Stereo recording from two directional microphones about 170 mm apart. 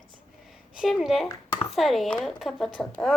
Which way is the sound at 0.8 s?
Centre (ahead or behind).